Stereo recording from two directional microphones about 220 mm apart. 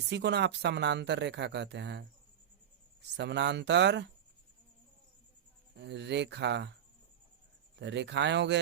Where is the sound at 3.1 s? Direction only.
50° right (ahead or behind).